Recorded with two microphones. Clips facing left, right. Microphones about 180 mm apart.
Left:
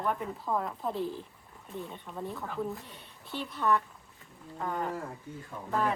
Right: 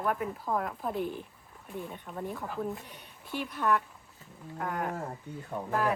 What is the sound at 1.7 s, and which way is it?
Speech, 5° right (ahead or behind).